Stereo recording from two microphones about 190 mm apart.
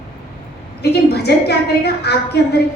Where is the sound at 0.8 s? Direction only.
60° left (ahead or behind).